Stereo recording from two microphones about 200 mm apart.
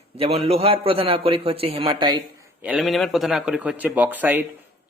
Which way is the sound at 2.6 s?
5° right (ahead or behind).